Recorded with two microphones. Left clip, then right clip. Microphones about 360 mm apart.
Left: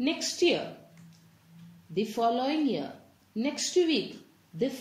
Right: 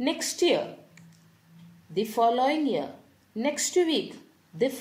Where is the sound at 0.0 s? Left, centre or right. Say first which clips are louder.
Right 1 dB; right.